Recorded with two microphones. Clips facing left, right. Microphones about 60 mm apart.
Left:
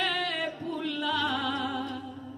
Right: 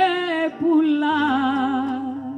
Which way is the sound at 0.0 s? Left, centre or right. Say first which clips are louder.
Right 11 dB; right.